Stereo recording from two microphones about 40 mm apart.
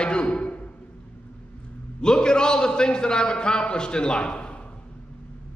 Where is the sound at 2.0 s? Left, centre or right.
Left.